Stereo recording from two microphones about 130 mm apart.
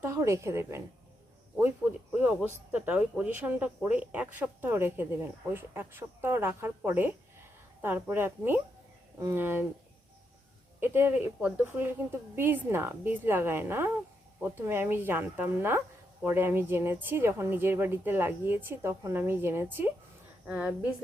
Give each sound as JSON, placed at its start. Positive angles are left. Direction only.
{"t": 0.0, "sound": "a woman's voice", "side_deg": -20}
{"t": 2.1, "sound": "speech", "side_deg": -15}
{"t": 10.8, "sound": "speech", "side_deg": -15}